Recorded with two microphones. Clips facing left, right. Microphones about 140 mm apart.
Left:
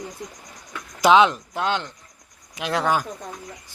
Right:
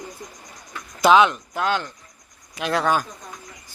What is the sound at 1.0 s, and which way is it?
Speech, 25° left (ahead or behind).